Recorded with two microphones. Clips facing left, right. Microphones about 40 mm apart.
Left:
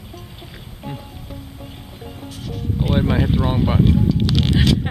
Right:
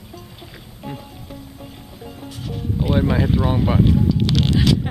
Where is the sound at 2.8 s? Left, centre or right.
Centre.